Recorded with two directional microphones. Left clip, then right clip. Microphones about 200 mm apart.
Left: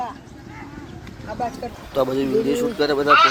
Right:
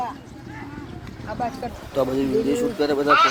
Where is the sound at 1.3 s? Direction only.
40° left (ahead or behind).